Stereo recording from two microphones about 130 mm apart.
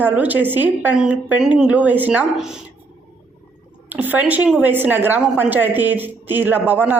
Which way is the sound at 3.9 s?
15° right (ahead or behind).